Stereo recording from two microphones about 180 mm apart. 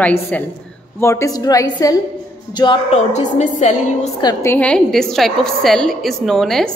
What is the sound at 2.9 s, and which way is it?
A woman's voice, 40° left (ahead or behind).